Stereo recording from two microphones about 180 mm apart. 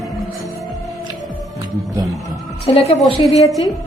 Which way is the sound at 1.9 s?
20° right (ahead or behind).